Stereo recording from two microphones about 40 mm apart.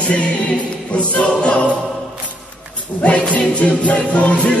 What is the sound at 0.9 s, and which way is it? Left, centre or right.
Choir, left.